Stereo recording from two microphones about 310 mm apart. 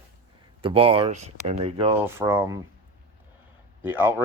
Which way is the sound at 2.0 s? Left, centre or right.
Centre.